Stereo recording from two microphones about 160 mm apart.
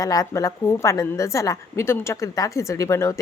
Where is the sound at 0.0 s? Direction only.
20° left (ahead or behind).